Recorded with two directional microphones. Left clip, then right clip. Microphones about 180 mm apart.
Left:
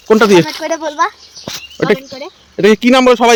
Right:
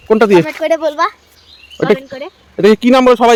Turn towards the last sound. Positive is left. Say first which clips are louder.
# even
turn(degrees=0)  # may be behind; listen again after turning